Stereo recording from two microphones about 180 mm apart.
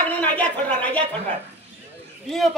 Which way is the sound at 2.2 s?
Centre (ahead or behind).